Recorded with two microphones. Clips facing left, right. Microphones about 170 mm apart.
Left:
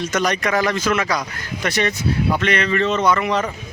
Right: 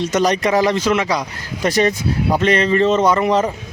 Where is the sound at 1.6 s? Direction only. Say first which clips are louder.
Right 4 dB; 40° right (ahead or behind).